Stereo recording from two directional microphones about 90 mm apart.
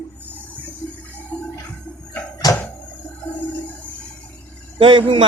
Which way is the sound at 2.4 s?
45° left (ahead or behind).